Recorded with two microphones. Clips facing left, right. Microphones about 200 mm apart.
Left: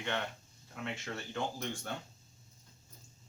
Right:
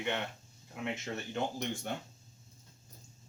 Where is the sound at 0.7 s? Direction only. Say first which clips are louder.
Right 3 dB; 20° right (ahead or behind).